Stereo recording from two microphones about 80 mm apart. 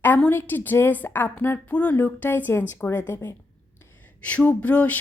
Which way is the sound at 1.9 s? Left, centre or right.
Left.